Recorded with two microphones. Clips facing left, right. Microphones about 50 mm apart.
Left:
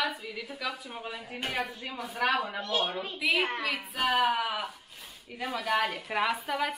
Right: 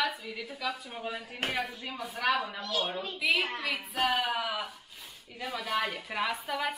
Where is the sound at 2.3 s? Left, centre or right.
Left.